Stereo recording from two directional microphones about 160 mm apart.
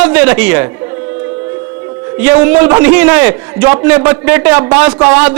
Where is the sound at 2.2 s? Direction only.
10° right (ahead or behind).